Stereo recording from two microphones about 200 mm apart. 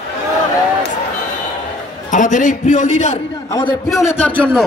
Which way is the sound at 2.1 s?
40° left (ahead or behind).